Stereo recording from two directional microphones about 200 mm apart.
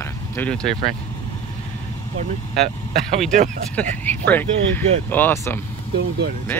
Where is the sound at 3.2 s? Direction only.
40° right (ahead or behind).